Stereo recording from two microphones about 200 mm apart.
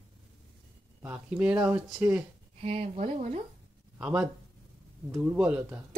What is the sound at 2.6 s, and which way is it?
Speech, 30° right (ahead or behind).